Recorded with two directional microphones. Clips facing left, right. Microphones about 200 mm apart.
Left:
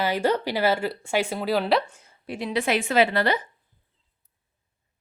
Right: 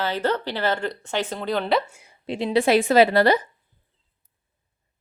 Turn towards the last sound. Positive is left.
turn(degrees=-40)  # may be behind; listen again after turning